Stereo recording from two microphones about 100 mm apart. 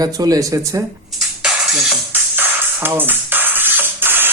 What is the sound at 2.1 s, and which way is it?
Music, 20° right (ahead or behind).